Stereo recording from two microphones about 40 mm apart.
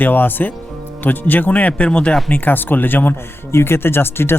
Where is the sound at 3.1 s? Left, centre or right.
Left.